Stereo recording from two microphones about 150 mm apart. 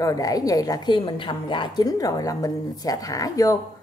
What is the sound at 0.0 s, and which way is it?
A woman's voice, 25° left (ahead or behind).